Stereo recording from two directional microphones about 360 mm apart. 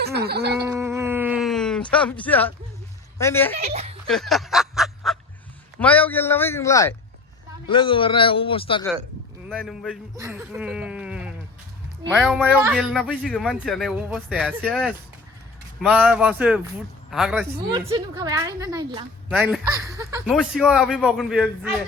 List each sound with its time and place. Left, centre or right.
0.0 s gargling: right
0.7 s a sound: centre
3.2 s a man's voice: centre
3.6 s a woman's voice: centre
4.0 s a sound: centre
5.8 s a man's voice: centre
9.5 s a man's voice: centre